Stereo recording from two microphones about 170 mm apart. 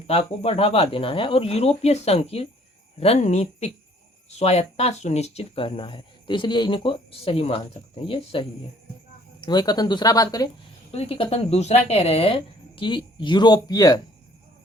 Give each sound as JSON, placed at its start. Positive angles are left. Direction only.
{"t": 0.1, "sound": "speech", "side_deg": 35}
{"t": 9.5, "sound": "speech", "side_deg": 25}
{"t": 10.9, "sound": "speech", "side_deg": 35}